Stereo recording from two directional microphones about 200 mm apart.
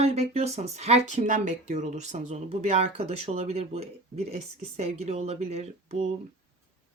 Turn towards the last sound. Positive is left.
turn(degrees=-30)  # may be behind; listen again after turning